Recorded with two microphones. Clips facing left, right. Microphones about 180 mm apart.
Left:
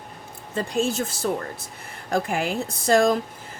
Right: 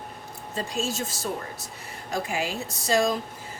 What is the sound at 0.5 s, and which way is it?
A woman's voice, 60° left (ahead or behind).